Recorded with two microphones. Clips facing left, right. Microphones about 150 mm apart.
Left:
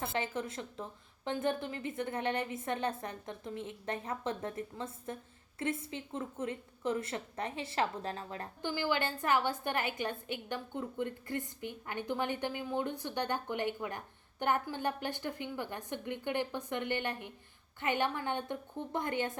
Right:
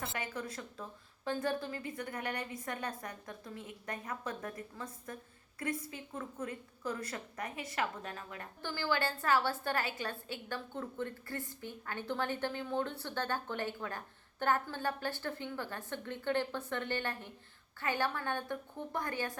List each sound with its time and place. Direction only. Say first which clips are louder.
0.0 s a woman's voice: left 4 dB; 25° left (ahead or behind)
8.6 s a woman's voice: left 1 dB; 15° left (ahead or behind)